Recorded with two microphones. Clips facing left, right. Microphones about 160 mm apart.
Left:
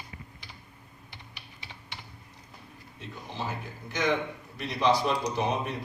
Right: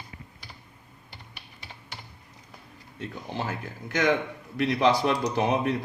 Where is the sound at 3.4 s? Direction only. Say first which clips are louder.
Right 2 dB; 80° right.